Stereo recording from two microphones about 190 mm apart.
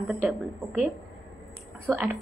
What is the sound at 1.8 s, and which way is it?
Speech, 10° right (ahead or behind).